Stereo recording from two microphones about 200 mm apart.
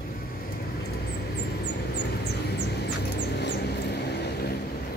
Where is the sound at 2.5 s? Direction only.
55° left (ahead or behind).